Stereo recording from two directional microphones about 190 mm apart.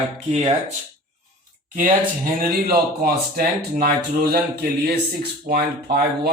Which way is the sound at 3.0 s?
50° right (ahead or behind).